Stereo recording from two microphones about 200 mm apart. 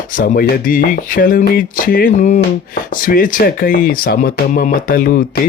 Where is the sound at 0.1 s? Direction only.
40° left (ahead or behind).